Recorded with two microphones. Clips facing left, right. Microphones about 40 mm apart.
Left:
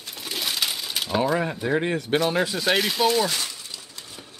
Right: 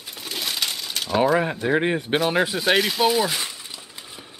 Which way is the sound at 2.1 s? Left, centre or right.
Centre.